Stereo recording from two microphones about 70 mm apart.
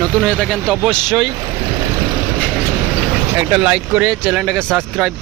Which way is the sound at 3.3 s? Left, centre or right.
Centre.